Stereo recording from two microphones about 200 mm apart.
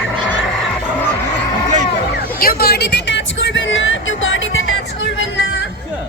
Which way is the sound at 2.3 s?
50° left (ahead or behind).